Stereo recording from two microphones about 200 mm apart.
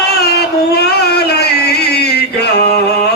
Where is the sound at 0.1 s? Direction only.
55° left (ahead or behind).